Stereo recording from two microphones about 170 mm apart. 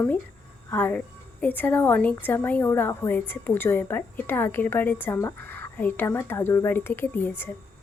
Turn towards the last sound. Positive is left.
turn(degrees=10)  # may be behind; listen again after turning